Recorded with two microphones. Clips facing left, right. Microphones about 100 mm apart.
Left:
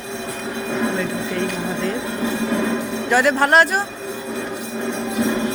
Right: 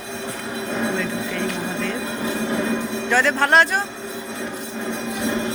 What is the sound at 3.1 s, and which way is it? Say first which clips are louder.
Speech: left 2 dB; 10° left (ahead or behind).